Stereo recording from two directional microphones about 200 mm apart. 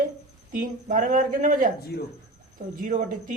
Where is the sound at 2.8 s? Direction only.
40° right (ahead or behind).